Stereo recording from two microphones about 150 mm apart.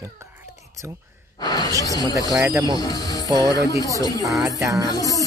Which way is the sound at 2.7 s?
25° left (ahead or behind).